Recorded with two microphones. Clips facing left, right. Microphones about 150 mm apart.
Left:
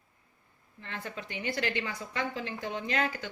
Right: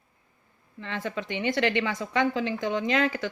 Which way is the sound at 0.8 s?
90° right.